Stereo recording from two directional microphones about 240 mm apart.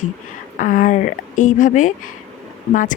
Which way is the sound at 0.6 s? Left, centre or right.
Left.